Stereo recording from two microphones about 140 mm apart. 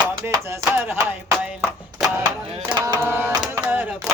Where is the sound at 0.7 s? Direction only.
15° right (ahead or behind).